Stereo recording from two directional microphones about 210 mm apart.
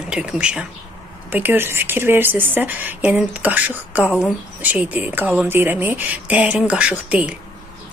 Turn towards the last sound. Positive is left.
turn(degrees=-5)  # may be behind; listen again after turning